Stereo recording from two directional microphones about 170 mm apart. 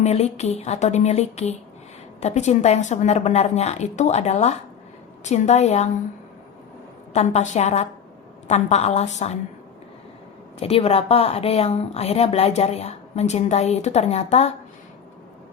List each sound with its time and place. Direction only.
0.0 s a woman's voice: 40° left (ahead or behind)
7.1 s a woman's voice: 40° left (ahead or behind)
10.6 s a woman's voice: 35° left (ahead or behind)